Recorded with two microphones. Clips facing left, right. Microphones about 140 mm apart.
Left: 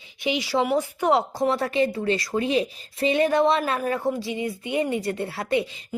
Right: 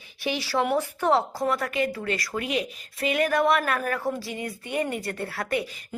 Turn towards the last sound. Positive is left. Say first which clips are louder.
# left 4 dB
turn(degrees=25)  # may be behind; listen again after turning